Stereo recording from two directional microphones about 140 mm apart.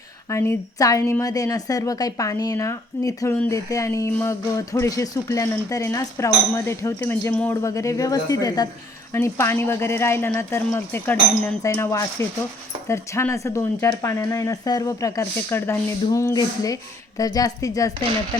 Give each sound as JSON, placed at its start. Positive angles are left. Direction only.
{"t": 0.3, "sound": "speech", "side_deg": 20}